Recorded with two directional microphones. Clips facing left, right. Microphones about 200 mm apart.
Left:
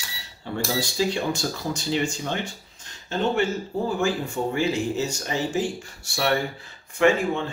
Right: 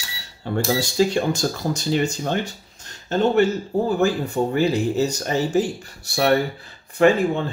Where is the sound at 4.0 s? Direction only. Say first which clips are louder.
Right 5 dB; 40° right (ahead or behind).